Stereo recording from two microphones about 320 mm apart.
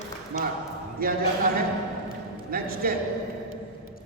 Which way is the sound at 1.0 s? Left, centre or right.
Right.